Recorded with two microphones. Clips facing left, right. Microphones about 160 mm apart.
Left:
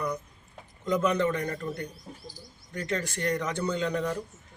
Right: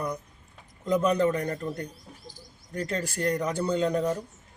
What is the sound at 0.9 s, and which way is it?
Speech, 35° right (ahead or behind).